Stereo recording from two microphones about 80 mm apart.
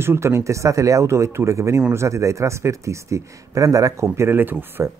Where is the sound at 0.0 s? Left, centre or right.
Right.